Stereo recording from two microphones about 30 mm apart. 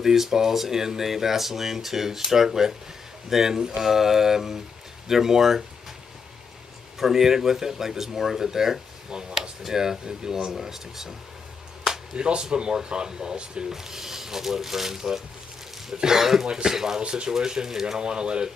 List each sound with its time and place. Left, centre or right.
0.0 s speech: centre
7.0 s speech: centre
9.1 s speech: right
9.6 s speech: centre
12.2 s speech: right
13.7 s speech: centre
17.0 s speech: right
17.3 s speech: centre
17.9 s speech: right